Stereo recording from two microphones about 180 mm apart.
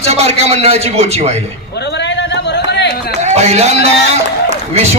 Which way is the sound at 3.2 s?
35° right (ahead or behind).